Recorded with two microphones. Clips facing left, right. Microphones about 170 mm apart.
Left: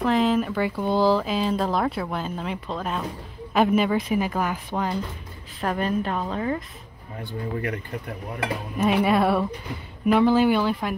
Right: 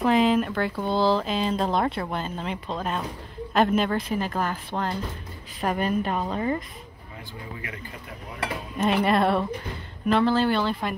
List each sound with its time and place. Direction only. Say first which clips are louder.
0.0 s speech: right 1 dB; 5° right (ahead or behind)
5.6 s speech: even; 5° right (ahead or behind)
7.5 s speech: left 11 dB; 55° left (ahead or behind)
8.7 s speech: left 1 dB; 10° left (ahead or behind)